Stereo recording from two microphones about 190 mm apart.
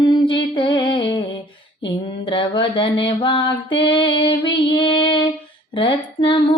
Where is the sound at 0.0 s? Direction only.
25° left (ahead or behind).